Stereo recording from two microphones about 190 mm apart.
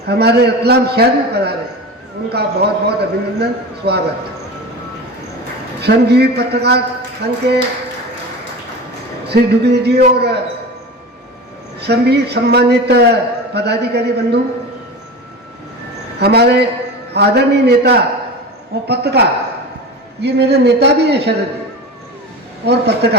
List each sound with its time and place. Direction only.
0.1 s a man's voice: 60° right (ahead or behind)
5.8 s a man's voice: 60° right (ahead or behind)
9.2 s a man's voice: 60° right (ahead or behind)
11.8 s a man's voice: 60° right (ahead or behind)
16.1 s a man's voice: 60° right (ahead or behind)
20.2 s a man's voice: 60° right (ahead or behind)
22.6 s a man's voice: 60° right (ahead or behind)